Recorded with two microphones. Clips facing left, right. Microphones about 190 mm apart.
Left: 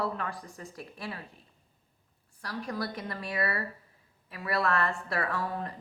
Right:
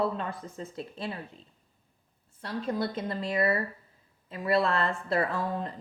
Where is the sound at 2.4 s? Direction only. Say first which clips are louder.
Right 4 dB; 25° right (ahead or behind).